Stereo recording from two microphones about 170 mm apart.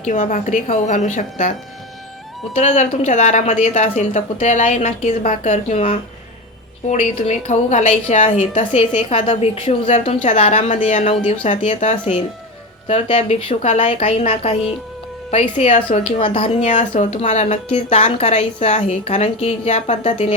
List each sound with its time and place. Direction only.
0.0 s a woman's voice: 45° left (ahead or behind)
2.6 s a woman's voice: 40° left (ahead or behind)